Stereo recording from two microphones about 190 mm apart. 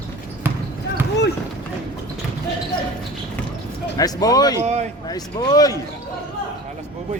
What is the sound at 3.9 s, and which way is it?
Speech, 20° left (ahead or behind).